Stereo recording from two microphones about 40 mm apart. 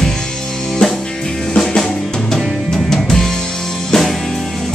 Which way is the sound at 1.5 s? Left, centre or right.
Centre.